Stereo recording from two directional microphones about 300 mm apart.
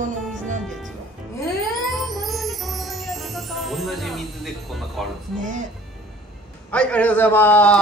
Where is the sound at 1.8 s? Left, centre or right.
Centre.